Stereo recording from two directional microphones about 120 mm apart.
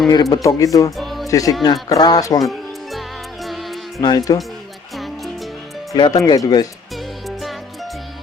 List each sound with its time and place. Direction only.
0.1 s speech: 30° left (ahead or behind)
0.9 s music: centre (ahead or behind)
1.3 s speech: 30° left (ahead or behind)
3.4 s music: centre (ahead or behind)
4.3 s speech: 30° left (ahead or behind)
4.9 s music: centre (ahead or behind)
5.9 s speech: 30° left (ahead or behind)
6.9 s music: centre (ahead or behind)